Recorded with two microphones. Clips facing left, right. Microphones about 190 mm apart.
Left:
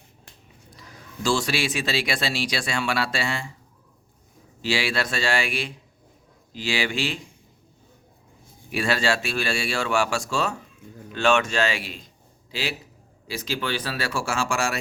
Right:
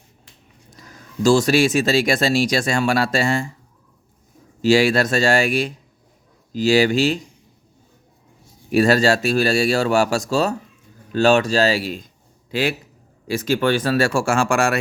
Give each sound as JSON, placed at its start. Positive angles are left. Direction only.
{"t": 0.8, "sound": "speech", "side_deg": -45}
{"t": 4.6, "sound": "speech", "side_deg": -45}
{"t": 8.7, "sound": "speech", "side_deg": -40}
{"t": 12.5, "sound": "speech", "side_deg": -55}